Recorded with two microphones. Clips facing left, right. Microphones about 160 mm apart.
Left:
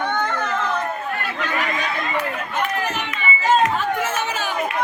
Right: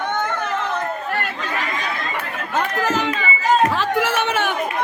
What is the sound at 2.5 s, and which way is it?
Run, 90° right.